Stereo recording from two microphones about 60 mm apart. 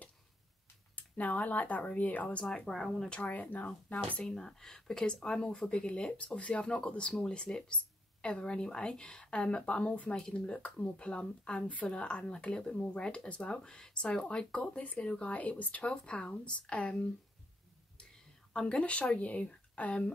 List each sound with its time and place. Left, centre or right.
0.9 s speech: left; by 3.1 s centre
3.1 s speech: left
4.2 s a woman's voice: centre
18.5 s speech: centre